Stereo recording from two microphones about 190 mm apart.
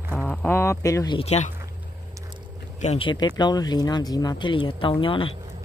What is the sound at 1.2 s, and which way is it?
Speech, 35° left (ahead or behind).